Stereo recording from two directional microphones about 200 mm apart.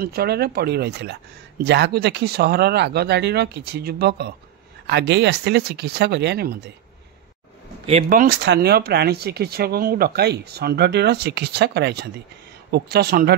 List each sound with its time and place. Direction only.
0.0 s speech: 50° right (ahead or behind)
8.1 s speech: 45° right (ahead or behind)